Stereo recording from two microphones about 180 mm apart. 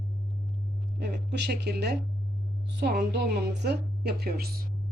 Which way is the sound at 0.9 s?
65° right (ahead or behind).